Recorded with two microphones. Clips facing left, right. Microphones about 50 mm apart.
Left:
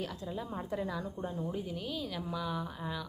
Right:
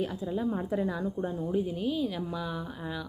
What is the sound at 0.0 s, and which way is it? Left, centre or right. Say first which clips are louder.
Speech: right 8 dB; centre.